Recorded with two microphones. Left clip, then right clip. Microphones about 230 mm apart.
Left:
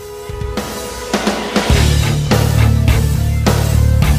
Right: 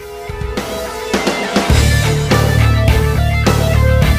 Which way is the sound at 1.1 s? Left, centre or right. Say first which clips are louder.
Right 1 dB; centre.